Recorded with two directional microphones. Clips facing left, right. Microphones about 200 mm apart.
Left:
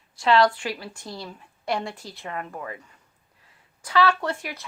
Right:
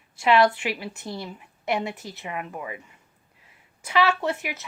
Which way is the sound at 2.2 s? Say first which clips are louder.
Even; 10° right (ahead or behind).